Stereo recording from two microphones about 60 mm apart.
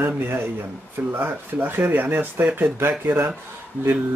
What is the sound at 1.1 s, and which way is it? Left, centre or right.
Speech, right.